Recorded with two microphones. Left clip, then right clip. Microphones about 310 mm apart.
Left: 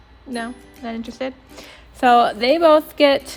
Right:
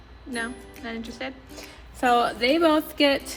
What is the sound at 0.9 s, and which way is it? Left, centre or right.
A woman's voice, centre.